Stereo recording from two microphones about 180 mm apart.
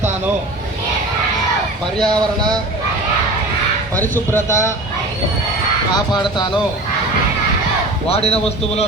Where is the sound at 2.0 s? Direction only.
25° right (ahead or behind).